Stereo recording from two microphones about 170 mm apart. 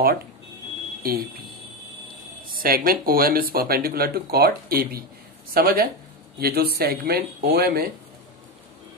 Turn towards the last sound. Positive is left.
turn(degrees=-65)  # may be behind; listen again after turning